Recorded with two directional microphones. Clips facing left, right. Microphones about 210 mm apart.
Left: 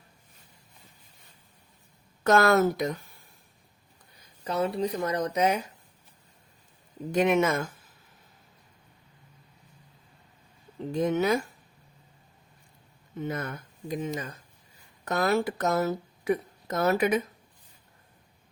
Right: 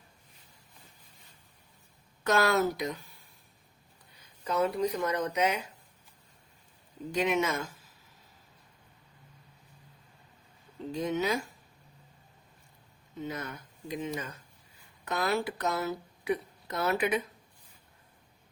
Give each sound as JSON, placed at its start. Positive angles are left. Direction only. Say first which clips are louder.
{"t": 2.2, "sound": "speech", "louder": "left 5 dB", "side_deg": 50}
{"t": 4.4, "sound": "speech", "louder": "left 1 dB", "side_deg": 30}
{"t": 7.1, "sound": "speech", "louder": "left 5 dB", "side_deg": 50}
{"t": 10.9, "sound": "speech", "louder": "left 5 dB", "side_deg": 50}
{"t": 13.2, "sound": "speech", "louder": "left 5 dB", "side_deg": 55}